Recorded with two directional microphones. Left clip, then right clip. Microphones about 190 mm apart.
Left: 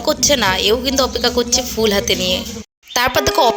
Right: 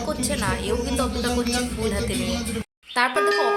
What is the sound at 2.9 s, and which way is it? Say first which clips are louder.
Speech: left 6 dB; 50° left (ahead or behind).